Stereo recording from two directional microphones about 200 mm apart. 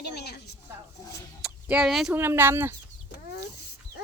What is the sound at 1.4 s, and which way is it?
Speech, 5° right (ahead or behind).